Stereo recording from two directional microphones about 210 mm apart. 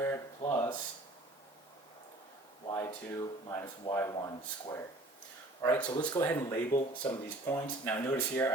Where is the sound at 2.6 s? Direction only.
20° left (ahead or behind).